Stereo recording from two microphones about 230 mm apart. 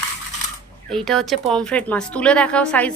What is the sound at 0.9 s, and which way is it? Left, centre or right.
Speech, centre.